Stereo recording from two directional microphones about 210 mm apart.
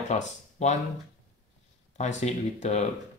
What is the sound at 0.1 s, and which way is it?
Speech, 35° left (ahead or behind).